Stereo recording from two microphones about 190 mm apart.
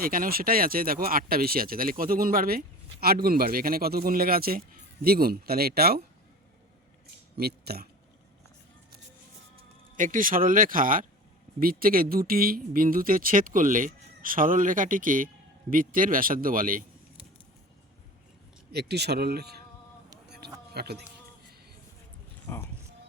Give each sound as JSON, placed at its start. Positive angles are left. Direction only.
{"t": 0.0, "sound": "speech", "side_deg": -50}
{"t": 7.3, "sound": "speech", "side_deg": -55}
{"t": 9.9, "sound": "speech", "side_deg": -45}
{"t": 18.7, "sound": "speech", "side_deg": -60}
{"t": 20.7, "sound": "speech", "side_deg": -60}